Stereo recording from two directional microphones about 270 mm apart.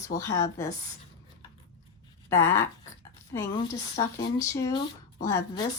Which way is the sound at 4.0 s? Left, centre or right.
Centre.